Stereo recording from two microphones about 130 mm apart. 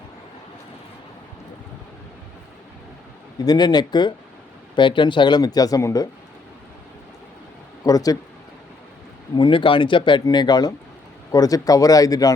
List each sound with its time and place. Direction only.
3.3 s speech: 30° left (ahead or behind)
7.9 s speech: 30° left (ahead or behind)
9.3 s speech: 40° left (ahead or behind)